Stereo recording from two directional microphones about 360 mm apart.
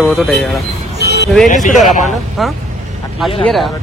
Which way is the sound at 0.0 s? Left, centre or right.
Centre.